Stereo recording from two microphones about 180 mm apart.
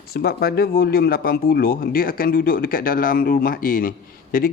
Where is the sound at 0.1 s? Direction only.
60° left (ahead or behind).